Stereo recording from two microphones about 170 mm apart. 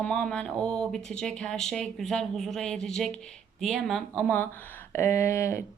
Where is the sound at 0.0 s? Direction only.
5° left (ahead or behind).